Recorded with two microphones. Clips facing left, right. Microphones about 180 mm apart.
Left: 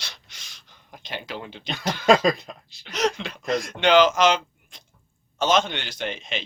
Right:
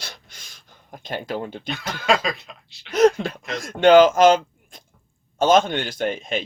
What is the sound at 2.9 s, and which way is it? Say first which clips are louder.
A man's voice: right 9 dB; 50° right (ahead or behind).